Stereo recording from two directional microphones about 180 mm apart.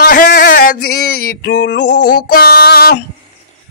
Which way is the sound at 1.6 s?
70° left (ahead or behind).